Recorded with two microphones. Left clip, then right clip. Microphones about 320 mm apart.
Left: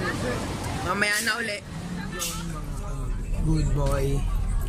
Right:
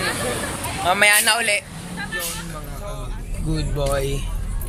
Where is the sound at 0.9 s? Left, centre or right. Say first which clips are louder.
Right 9 dB; centre.